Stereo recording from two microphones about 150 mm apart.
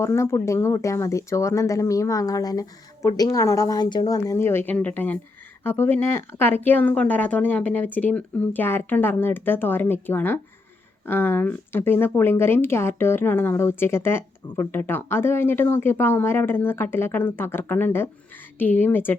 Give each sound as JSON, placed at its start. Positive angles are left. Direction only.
{"t": 0.0, "sound": "speech", "side_deg": 15}